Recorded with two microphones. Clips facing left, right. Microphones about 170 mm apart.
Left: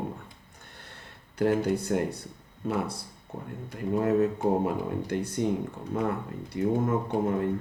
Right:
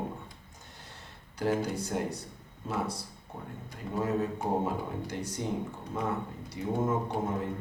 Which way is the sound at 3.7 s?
60° left (ahead or behind).